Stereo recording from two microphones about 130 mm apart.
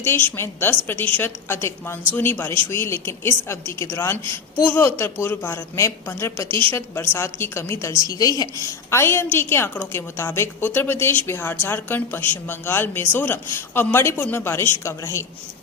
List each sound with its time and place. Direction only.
0.0 s a woman's voice: 15° left (ahead or behind)